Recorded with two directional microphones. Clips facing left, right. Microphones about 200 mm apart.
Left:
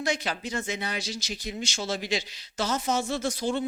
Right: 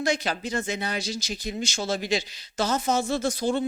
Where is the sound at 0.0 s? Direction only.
35° right (ahead or behind).